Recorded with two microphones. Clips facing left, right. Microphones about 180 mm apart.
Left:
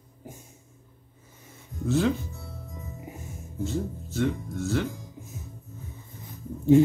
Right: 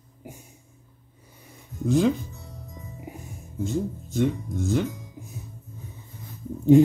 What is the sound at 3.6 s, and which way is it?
Speech, 15° right (ahead or behind).